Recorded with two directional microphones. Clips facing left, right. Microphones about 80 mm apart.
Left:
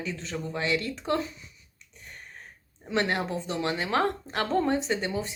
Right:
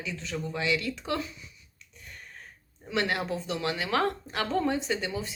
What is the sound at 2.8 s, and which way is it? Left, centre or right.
Speech, left.